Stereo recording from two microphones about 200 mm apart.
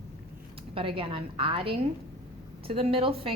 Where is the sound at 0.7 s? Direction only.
25° right (ahead or behind).